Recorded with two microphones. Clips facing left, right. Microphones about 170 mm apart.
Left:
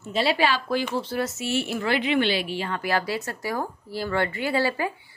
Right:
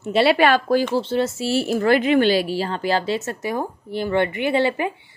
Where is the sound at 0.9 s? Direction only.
25° right (ahead or behind).